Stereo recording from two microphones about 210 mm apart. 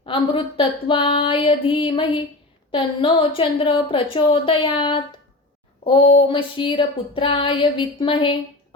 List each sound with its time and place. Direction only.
0.0 s a woman's voice: 25° left (ahead or behind)